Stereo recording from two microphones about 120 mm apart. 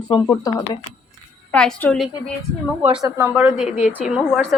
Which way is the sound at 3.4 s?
5° right (ahead or behind).